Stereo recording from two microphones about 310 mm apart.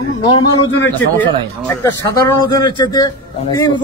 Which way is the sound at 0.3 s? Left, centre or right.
Centre.